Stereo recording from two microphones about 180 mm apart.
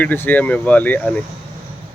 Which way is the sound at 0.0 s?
10° left (ahead or behind).